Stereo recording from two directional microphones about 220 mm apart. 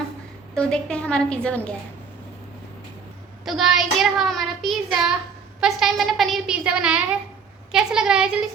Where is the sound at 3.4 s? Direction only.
Centre (ahead or behind).